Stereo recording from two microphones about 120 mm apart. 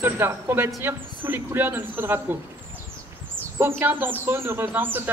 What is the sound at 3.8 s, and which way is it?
Speech, 15° right (ahead or behind).